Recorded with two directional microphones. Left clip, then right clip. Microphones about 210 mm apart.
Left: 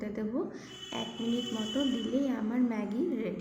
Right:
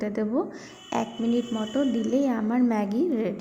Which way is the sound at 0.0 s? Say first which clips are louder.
Right 8 dB; 30° right (ahead or behind).